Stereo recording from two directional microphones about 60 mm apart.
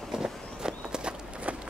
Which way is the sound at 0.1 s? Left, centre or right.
Centre.